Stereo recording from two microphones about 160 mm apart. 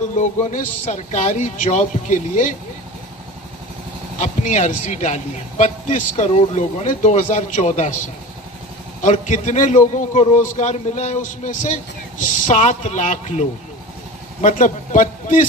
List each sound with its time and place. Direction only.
0.2 s a man's voice: 50° left (ahead or behind)
4.2 s a man's voice: 50° left (ahead or behind)
9.0 s a man's voice: 50° left (ahead or behind)